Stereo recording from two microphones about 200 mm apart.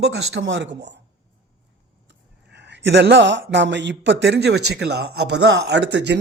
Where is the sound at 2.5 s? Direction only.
60° right (ahead or behind).